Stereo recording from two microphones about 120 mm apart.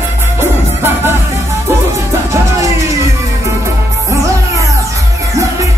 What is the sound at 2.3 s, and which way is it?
Music, 25° right (ahead or behind).